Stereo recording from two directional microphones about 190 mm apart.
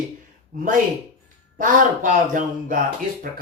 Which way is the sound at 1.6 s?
45° right (ahead or behind).